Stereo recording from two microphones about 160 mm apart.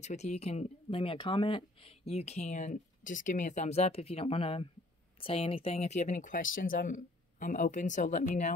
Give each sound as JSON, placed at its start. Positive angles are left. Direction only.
{"t": 0.0, "sound": "speech", "side_deg": 45}